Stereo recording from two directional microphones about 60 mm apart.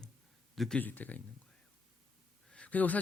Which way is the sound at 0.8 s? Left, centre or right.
Left.